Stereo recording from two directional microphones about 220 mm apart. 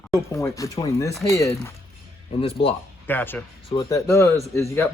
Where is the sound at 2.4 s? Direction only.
25° left (ahead or behind).